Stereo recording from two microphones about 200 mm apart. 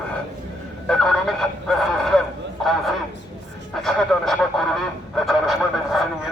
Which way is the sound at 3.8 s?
Centre (ahead or behind).